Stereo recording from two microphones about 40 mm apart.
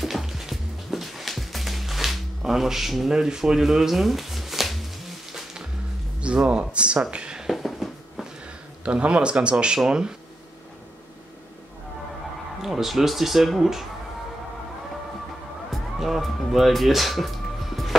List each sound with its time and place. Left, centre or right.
0.0 s music: centre
3.1 s speech: centre
5.3 s music: centre
6.2 s speech: right
7.4 s a sound: centre
8.8 s speech: right
12.6 s speech: centre
15.7 s music: centre